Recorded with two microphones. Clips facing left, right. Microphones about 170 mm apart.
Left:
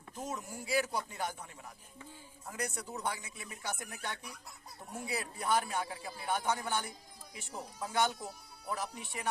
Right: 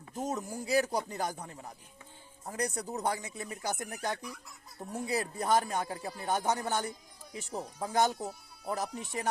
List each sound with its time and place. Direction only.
0.1 s speech: 40° right (ahead or behind)